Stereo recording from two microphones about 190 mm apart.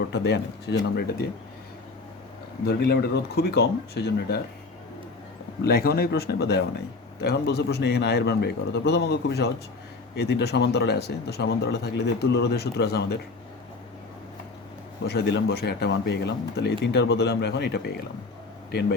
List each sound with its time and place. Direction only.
0.1 s speech: 60° left (ahead or behind)
2.6 s speech: 55° left (ahead or behind)
5.6 s speech: 55° left (ahead or behind)
15.0 s speech: 60° left (ahead or behind)